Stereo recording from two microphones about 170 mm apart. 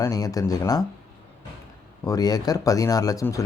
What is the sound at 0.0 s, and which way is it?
Speech, 20° left (ahead or behind).